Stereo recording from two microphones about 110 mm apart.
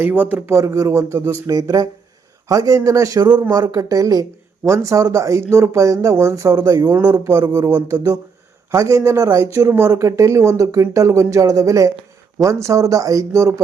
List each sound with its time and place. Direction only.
0.0 s a man's voice: 15° right (ahead or behind)
0.5 s speech: 30° right (ahead or behind)